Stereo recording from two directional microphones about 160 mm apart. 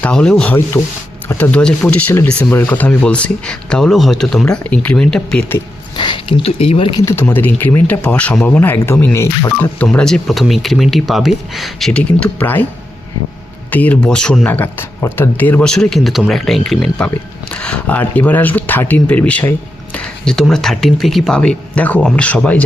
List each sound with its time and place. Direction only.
0.0 s speech: 5° left (ahead or behind)
6.0 s speech: 30° left (ahead or behind)
7.0 s speech: 15° left (ahead or behind)
13.7 s speech: 10° left (ahead or behind)